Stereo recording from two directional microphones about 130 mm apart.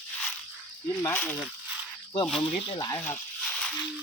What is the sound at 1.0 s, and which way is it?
Speech, 15° left (ahead or behind).